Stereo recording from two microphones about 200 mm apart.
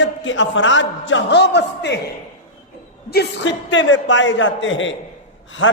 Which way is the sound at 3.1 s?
55° left (ahead or behind).